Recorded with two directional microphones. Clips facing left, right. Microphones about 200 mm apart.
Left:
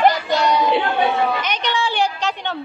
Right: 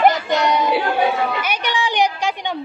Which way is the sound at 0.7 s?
5° right (ahead or behind).